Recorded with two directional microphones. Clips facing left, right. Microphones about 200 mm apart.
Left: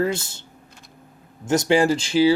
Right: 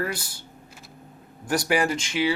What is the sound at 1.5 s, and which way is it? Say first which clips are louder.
Speech: left 6 dB; 25° left (ahead or behind).